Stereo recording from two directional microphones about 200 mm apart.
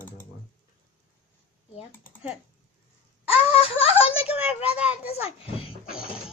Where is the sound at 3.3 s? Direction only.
30° left (ahead or behind).